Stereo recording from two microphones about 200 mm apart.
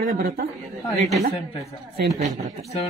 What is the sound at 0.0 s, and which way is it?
Speech, 45° right (ahead or behind).